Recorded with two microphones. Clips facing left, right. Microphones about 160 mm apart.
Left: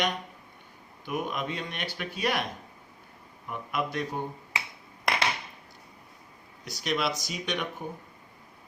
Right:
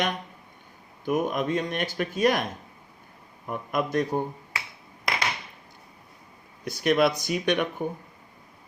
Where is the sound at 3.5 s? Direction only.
45° right (ahead or behind).